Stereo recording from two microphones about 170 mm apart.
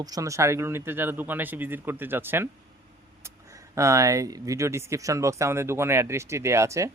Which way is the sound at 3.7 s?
20° right (ahead or behind).